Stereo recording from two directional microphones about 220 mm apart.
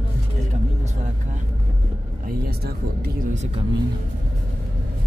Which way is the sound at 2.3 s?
45° right (ahead or behind).